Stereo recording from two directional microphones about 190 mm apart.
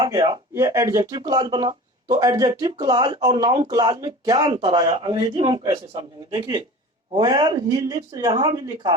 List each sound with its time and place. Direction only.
0.0 s speech: 20° right (ahead or behind)
7.2 s speech: 20° right (ahead or behind)